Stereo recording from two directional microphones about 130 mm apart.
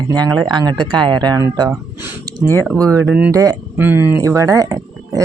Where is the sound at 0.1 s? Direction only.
30° right (ahead or behind).